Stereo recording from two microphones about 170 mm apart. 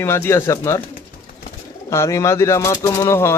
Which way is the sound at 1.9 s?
15° left (ahead or behind).